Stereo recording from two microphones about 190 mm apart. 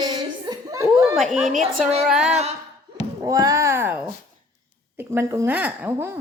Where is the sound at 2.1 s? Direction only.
5° right (ahead or behind).